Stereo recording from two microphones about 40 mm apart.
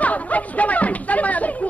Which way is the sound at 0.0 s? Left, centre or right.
Left.